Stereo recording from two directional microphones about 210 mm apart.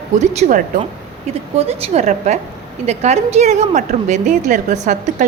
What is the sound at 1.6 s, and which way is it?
A woman's voice, 30° right (ahead or behind).